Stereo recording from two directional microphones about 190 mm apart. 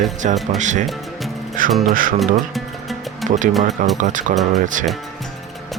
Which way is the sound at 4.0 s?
40° right (ahead or behind).